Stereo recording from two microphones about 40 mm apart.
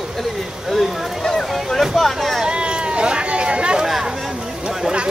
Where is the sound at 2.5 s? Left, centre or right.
Right.